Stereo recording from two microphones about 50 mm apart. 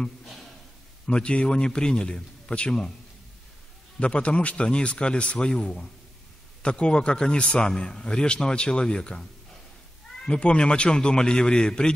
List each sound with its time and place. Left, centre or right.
1.0 s a man's voice: left
4.0 s a man's voice: left
10.2 s a man's voice: left